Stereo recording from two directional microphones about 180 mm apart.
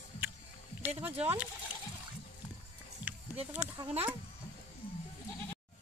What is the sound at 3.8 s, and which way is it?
Speech, 25° right (ahead or behind).